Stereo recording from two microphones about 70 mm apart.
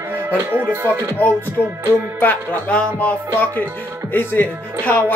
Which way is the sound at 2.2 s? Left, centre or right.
Left.